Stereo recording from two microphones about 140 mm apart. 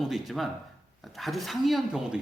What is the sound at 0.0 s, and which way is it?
Speech, centre (ahead or behind).